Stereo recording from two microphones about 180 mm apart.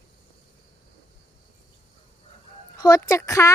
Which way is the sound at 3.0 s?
15° left (ahead or behind).